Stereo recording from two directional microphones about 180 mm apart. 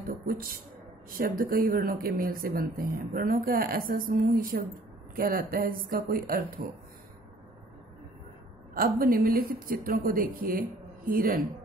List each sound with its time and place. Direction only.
1.1 s speech: 55° right (ahead or behind)
8.7 s speech: 50° right (ahead or behind)